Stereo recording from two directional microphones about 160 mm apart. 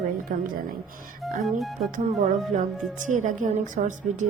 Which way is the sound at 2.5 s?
50° right (ahead or behind).